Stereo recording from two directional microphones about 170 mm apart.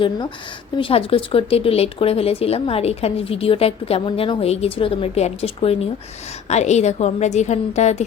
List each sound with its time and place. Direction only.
0.8 s speech: 30° left (ahead or behind)